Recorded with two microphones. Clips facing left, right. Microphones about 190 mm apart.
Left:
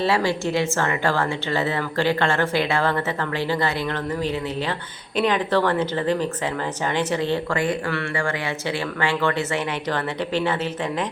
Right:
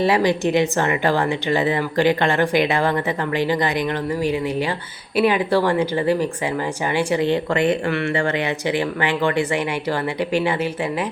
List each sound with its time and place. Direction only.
0.0 s a woman's voice: 15° right (ahead or behind)